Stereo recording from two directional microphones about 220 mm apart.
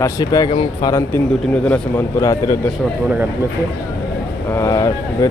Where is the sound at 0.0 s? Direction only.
15° left (ahead or behind).